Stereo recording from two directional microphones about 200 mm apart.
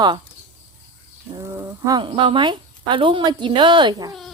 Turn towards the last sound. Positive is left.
turn(degrees=-20)  # may be behind; listen again after turning